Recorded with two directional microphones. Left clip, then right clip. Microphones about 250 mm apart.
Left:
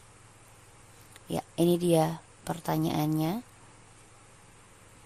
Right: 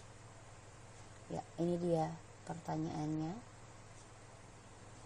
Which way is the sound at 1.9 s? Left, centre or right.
Left.